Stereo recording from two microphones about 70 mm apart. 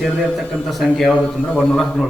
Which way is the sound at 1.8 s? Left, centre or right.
Centre.